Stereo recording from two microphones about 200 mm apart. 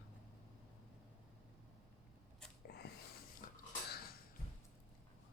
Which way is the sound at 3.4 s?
45° left (ahead or behind).